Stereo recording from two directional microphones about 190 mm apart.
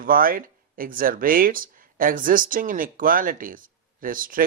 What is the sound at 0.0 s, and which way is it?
Speech, 50° right (ahead or behind).